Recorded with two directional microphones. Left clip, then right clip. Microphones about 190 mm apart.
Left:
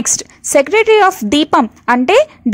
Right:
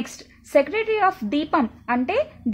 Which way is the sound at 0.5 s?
45° left (ahead or behind).